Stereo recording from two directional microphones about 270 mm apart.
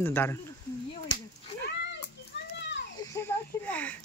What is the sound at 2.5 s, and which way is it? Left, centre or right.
Children playing, left.